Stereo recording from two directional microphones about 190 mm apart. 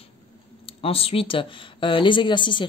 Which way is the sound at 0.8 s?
30° left (ahead or behind).